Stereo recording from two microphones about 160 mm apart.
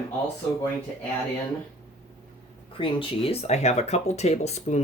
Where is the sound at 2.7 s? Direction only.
35° left (ahead or behind).